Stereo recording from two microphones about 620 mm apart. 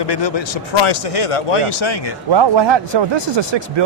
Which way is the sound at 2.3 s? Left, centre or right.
Right.